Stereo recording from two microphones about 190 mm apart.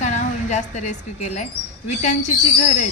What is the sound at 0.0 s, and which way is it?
A woman's voice, 40° left (ahead or behind).